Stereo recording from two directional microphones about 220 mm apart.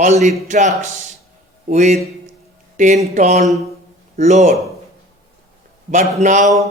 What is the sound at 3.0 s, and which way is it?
Speech, 30° right (ahead or behind).